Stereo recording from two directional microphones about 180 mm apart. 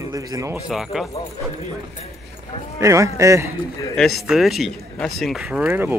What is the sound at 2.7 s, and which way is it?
Speech, 15° right (ahead or behind).